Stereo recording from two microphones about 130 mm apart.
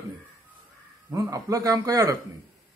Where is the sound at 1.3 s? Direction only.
25° right (ahead or behind).